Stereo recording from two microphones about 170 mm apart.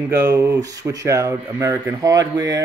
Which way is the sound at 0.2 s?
15° right (ahead or behind).